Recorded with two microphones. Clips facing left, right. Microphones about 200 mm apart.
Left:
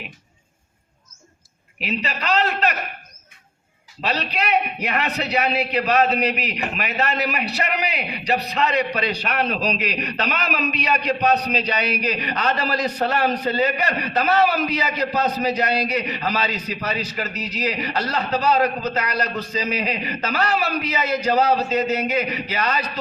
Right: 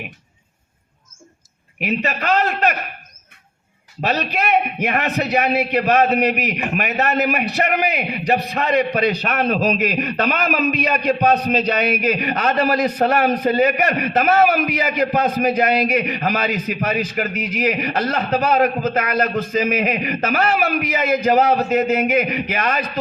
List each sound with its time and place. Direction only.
1.8 s a man's voice: 50° right (ahead or behind)
4.0 s a man's voice: 45° right (ahead or behind)